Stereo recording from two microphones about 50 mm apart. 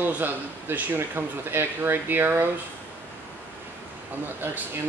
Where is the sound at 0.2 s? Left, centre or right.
Right.